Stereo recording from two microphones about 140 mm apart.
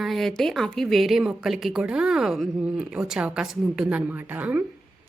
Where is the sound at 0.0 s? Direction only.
Centre (ahead or behind).